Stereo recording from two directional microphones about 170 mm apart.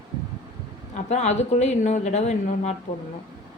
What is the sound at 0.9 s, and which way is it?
Speech, 40° left (ahead or behind).